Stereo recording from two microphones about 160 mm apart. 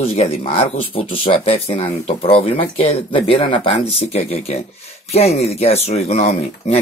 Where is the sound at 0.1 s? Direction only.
35° left (ahead or behind).